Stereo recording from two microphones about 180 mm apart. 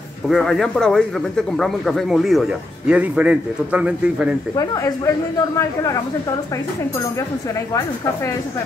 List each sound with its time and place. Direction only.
0.3 s a man's voice: centre (ahead or behind)
4.6 s speech: 20° left (ahead or behind)